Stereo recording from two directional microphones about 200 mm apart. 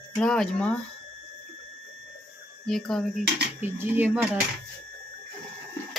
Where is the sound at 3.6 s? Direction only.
10° right (ahead or behind).